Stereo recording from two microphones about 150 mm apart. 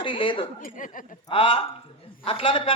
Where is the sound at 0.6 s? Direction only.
65° left (ahead or behind).